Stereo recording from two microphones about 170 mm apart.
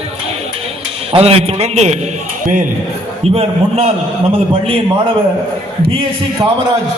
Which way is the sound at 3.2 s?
35° right (ahead or behind).